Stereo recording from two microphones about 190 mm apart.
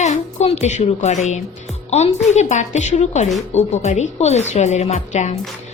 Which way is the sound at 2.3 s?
40° left (ahead or behind).